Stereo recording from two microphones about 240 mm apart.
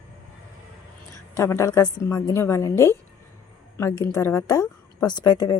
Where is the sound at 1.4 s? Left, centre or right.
Centre.